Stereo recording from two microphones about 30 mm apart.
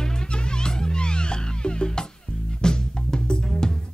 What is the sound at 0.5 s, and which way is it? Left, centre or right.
Music, left.